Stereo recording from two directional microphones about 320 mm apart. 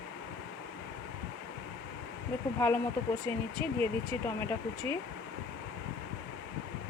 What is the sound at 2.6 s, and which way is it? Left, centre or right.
Speech, centre.